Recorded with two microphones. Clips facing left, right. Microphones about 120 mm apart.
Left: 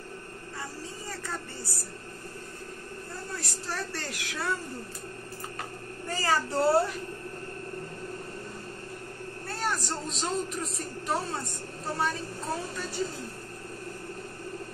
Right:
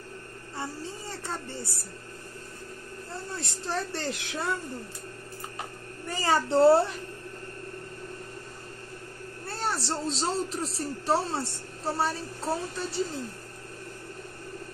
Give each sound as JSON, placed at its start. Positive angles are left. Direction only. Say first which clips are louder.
{"t": 1.2, "sound": "a sound", "louder": "right 2 dB", "side_deg": -25}
{"t": 3.3, "sound": "a woman's voice", "louder": "right 4 dB", "side_deg": -25}
{"t": 6.0, "sound": "a woman's voice", "louder": "right 2 dB", "side_deg": -20}
{"t": 9.5, "sound": "speech", "louder": "right 1 dB", "side_deg": -30}